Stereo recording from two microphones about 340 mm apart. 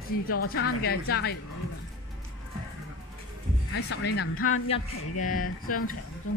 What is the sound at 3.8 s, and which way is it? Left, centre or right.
Speech, left.